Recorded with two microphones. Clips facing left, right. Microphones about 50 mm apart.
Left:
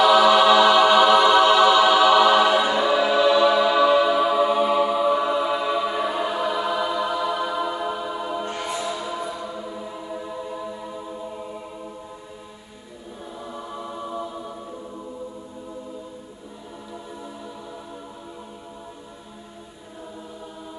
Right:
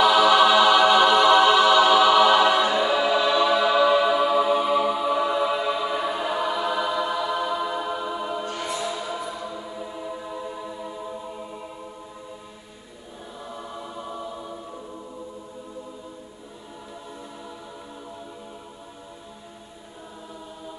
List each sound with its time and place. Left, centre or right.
0.0 s choir: centre
8.5 s music: left
8.9 s music: centre
9.3 s chant: centre
13.4 s choir: centre